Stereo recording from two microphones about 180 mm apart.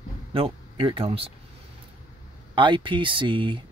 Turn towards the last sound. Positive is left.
turn(degrees=-25)  # may be behind; listen again after turning